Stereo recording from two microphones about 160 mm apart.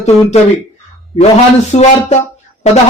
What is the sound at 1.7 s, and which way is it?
Speech, 40° left (ahead or behind).